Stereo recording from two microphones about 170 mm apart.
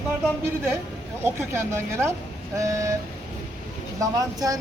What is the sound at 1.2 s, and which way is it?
A man's voice, 15° right (ahead or behind).